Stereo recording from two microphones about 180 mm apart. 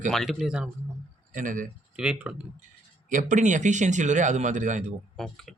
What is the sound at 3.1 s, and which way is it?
Speech, 45° right (ahead or behind).